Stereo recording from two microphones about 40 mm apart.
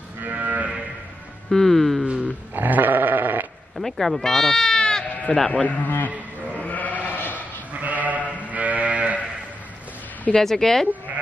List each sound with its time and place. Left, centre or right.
0.2 s livestock: right
1.5 s speech: centre
2.5 s sheep: right
3.7 s speech: centre
5.5 s a man's voice: left
5.9 s sheep: left
7.1 s sheep: left
7.8 s sheep: right
10.3 s speech: centre